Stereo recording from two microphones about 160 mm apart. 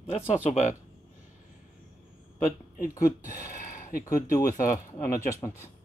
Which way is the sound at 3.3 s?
60° left (ahead or behind).